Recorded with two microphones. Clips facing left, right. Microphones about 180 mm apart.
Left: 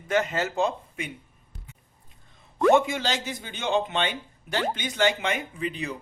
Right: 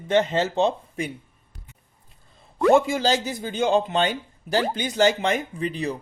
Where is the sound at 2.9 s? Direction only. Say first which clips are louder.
Right 6 dB; 35° right (ahead or behind).